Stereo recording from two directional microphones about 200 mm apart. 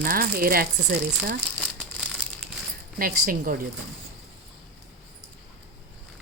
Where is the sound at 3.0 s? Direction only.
45° right (ahead or behind).